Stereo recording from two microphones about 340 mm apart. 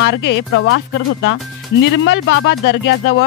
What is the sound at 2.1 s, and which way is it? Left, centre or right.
Speech, left.